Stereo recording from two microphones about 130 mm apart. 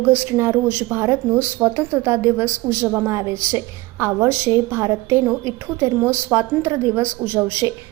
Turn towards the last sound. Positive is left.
turn(degrees=-20)  # may be behind; listen again after turning